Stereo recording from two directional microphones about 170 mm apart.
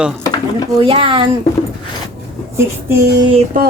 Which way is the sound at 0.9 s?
30° right (ahead or behind).